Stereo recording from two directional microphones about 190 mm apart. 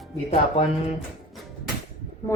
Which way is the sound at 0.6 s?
35° left (ahead or behind).